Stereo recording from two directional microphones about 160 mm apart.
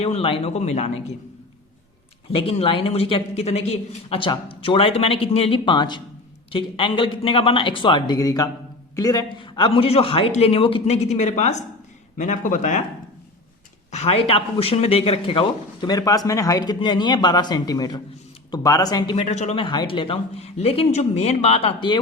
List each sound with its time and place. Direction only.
0.0 s speech: 35° left (ahead or behind)
2.3 s speech: 35° left (ahead or behind)
13.9 s a man's voice: 40° left (ahead or behind); by 19.1 s 25° left (ahead or behind)
19.1 s speech: 40° left (ahead or behind)
19.6 s speech: 30° left (ahead or behind)